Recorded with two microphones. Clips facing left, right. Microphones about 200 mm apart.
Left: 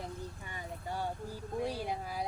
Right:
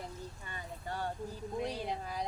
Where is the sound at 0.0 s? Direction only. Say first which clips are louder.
Left 2 dB; 15° left (ahead or behind).